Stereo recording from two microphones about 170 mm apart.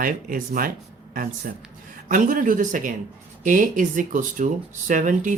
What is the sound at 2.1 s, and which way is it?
Speech, 50° right (ahead or behind).